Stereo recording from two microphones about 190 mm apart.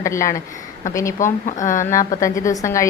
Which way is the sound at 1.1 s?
40° left (ahead or behind).